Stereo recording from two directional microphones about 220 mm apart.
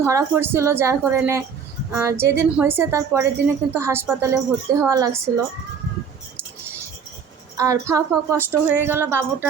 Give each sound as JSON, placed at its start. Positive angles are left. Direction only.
{"t": 0.0, "sound": "a woman's voice", "side_deg": -10}
{"t": 7.5, "sound": "a woman's voice", "side_deg": -15}